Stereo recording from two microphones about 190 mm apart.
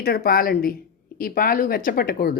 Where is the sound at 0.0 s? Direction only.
55° left (ahead or behind).